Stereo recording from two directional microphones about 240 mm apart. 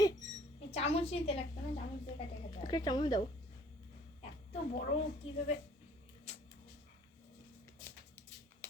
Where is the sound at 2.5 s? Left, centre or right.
Centre.